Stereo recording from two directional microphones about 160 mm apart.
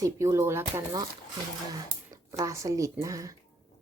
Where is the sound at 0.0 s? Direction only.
20° right (ahead or behind).